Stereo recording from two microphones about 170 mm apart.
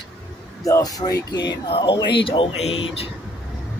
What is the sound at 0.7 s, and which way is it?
Speech, 20° left (ahead or behind).